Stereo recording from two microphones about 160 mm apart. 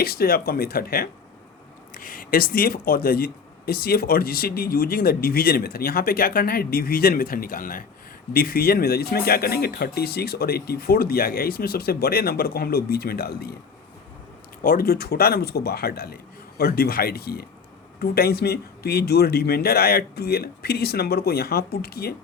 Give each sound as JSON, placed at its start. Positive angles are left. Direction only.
{"t": 0.0, "sound": "speech", "side_deg": 70}
{"t": 14.6, "sound": "speech", "side_deg": 65}